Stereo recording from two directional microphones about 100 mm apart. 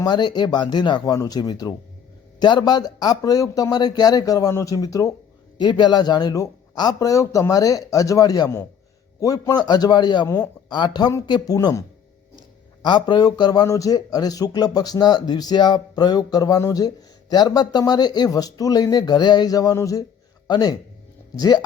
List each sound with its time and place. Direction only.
0.0 s a man's voice: 45° left (ahead or behind)
5.5 s a man's voice: 50° left (ahead or behind)
10.7 s a man's voice: 50° left (ahead or behind)
12.8 s a man's voice: 50° left (ahead or behind)